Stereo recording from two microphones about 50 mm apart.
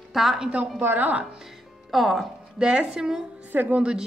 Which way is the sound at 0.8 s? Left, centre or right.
Right.